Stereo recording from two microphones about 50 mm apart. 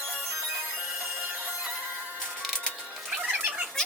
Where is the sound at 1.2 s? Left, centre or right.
Right.